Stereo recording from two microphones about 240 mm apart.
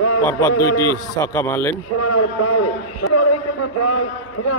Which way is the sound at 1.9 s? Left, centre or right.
Left.